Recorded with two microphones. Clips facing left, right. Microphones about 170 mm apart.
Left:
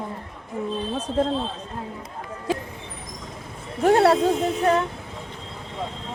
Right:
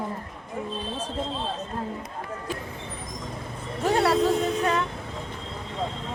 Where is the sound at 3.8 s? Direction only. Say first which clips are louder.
Left 6 dB; 55° left (ahead or behind).